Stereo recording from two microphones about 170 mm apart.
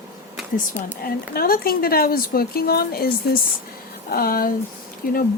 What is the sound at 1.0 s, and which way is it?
Speech, 60° left (ahead or behind).